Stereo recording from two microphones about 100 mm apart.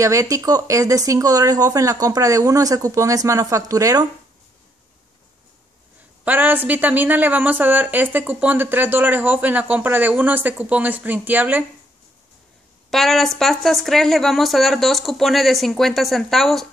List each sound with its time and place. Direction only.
0.0 s speech: 35° right (ahead or behind)
6.2 s a woman's voice: 20° right (ahead or behind)
12.9 s speech: centre (ahead or behind)